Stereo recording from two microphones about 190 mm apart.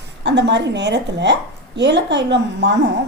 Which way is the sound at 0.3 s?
65° right (ahead or behind).